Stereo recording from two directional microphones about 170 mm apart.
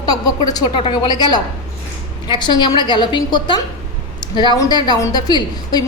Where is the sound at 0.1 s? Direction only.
20° left (ahead or behind).